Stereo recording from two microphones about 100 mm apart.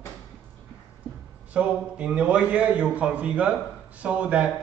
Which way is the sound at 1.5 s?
10° right (ahead or behind).